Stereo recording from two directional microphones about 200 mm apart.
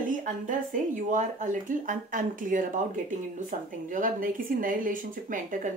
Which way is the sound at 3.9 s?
40° right (ahead or behind).